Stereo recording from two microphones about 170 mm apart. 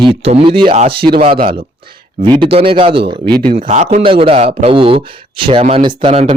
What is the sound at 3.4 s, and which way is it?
Speech, 50° right (ahead or behind).